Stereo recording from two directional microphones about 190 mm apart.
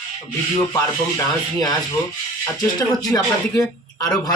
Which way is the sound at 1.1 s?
20° left (ahead or behind).